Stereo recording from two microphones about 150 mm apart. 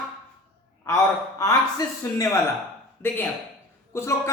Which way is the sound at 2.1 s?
20° left (ahead or behind).